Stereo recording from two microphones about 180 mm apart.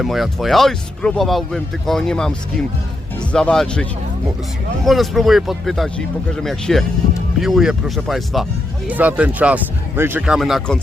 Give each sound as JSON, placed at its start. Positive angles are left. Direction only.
{"t": 0.0, "sound": "speech", "side_deg": 0}
{"t": 4.9, "sound": "speech", "side_deg": 0}